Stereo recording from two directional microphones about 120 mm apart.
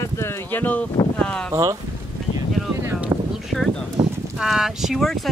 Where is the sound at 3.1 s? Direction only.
30° right (ahead or behind).